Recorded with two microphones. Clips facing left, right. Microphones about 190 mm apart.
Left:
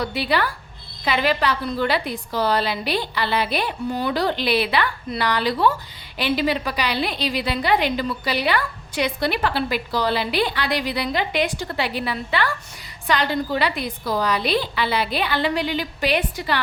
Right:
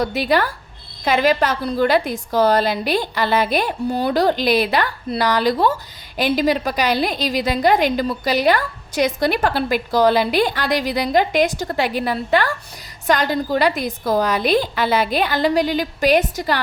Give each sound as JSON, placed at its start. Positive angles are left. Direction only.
{"t": 0.0, "sound": "a woman's voice", "side_deg": -45}